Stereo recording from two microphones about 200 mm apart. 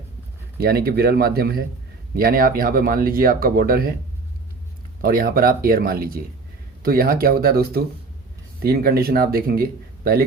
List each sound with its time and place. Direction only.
0.6 s speech: 50° right (ahead or behind)
5.0 s speech: 45° right (ahead or behind)